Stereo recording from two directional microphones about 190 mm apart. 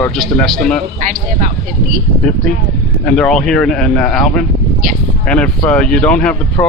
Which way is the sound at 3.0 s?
5° left (ahead or behind).